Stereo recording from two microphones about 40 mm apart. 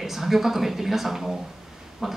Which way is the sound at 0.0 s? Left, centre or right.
Centre.